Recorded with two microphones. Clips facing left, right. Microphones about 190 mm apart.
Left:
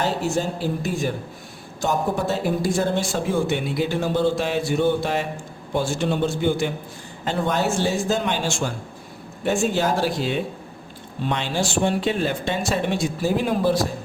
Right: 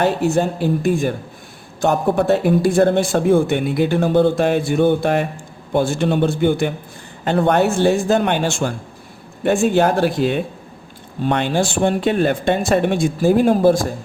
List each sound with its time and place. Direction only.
0.0 s speech: 60° right (ahead or behind)